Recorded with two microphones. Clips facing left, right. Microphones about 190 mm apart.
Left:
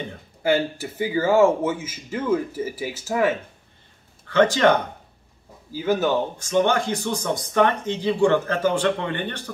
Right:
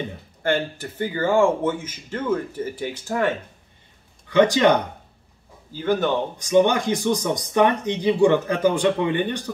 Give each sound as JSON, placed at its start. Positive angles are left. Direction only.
{"t": 0.4, "sound": "speech", "side_deg": 10}
{"t": 4.3, "sound": "speech", "side_deg": -15}
{"t": 5.7, "sound": "speech", "side_deg": 5}
{"t": 6.3, "sound": "speech", "side_deg": -15}